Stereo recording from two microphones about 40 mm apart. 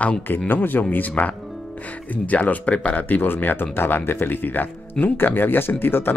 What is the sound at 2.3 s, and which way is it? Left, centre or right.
Speech, left.